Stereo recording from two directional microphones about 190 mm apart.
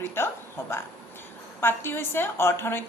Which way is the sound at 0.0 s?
10° left (ahead or behind).